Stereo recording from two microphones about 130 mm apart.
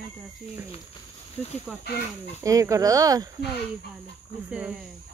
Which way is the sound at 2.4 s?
25° right (ahead or behind).